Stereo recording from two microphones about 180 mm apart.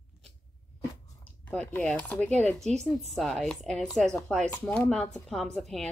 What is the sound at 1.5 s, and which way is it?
Speech, 10° left (ahead or behind).